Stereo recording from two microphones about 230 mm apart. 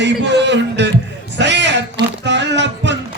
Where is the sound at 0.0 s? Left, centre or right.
Right.